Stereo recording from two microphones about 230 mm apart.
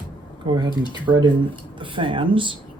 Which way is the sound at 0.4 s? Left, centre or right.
Centre.